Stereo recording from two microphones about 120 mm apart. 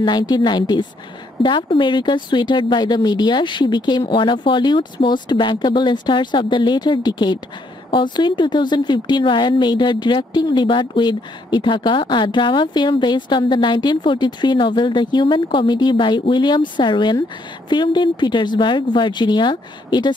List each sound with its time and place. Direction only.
0.0 s a woman's voice: 40° left (ahead or behind)